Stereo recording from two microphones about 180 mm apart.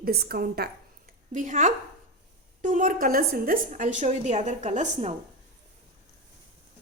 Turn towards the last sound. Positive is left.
turn(degrees=-40)  # may be behind; listen again after turning